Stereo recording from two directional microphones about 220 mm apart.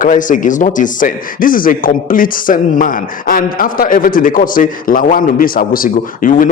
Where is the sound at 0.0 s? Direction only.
35° left (ahead or behind).